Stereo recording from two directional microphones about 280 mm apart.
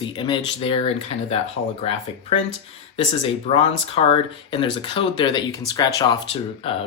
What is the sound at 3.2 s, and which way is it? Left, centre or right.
Speech, left.